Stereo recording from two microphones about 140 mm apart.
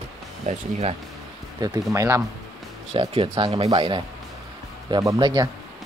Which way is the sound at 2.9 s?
40° right (ahead or behind).